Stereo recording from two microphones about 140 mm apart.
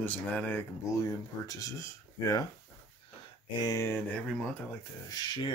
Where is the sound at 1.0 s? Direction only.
25° left (ahead or behind).